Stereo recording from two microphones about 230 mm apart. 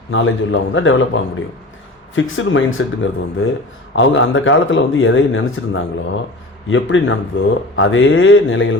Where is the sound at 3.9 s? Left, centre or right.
Left.